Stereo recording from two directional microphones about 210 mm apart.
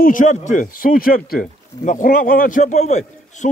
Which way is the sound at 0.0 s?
40° left (ahead or behind).